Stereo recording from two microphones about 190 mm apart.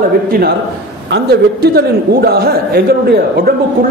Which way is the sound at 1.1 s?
55° right (ahead or behind).